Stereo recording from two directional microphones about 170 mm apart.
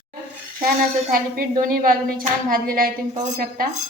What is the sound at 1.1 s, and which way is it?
A woman's voice, 55° right (ahead or behind).